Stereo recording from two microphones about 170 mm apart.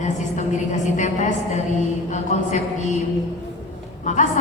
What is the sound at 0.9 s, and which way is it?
Speech, 45° left (ahead or behind).